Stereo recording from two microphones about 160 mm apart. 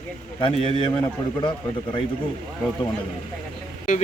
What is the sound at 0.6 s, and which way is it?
Speech, 35° right (ahead or behind).